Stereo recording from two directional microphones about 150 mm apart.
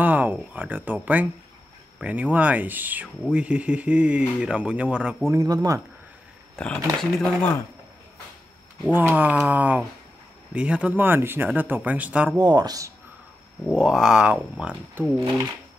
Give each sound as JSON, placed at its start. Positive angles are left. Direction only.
{"t": 0.0, "sound": "speech", "side_deg": -10}
{"t": 5.3, "sound": "speech", "side_deg": -25}
{"t": 6.5, "sound": "speech", "side_deg": 5}
{"t": 8.9, "sound": "speech", "side_deg": -10}
{"t": 12.4, "sound": "speech", "side_deg": -25}
{"t": 13.7, "sound": "speech", "side_deg": -5}